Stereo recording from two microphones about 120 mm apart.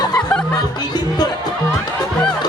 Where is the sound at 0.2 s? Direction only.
10° left (ahead or behind).